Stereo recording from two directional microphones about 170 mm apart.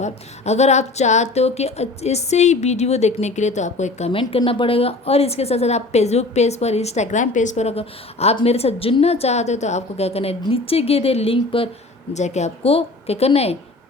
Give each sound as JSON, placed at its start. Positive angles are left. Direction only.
{"t": 0.0, "sound": "a woman's voice", "side_deg": 40}